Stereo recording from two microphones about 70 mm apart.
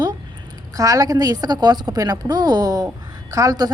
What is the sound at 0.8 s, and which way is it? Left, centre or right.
A woman's voice, right.